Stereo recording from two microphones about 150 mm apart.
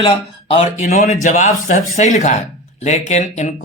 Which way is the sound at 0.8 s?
55° left (ahead or behind).